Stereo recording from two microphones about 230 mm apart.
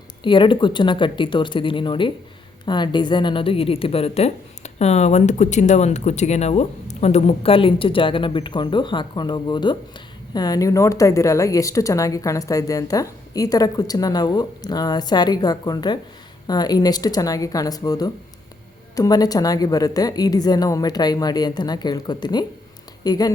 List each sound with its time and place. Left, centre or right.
0.2 s a woman's voice: left